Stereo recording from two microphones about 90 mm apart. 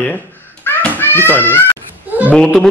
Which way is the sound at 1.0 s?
25° left (ahead or behind).